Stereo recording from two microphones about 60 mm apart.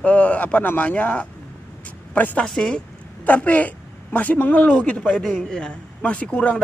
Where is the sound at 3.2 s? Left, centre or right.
Left.